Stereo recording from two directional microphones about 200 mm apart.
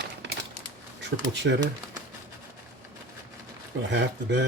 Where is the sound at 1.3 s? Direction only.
60° right (ahead or behind).